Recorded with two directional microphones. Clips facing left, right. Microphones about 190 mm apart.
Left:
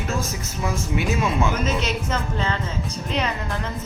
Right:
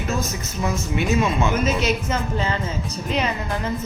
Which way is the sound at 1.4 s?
5° right (ahead or behind).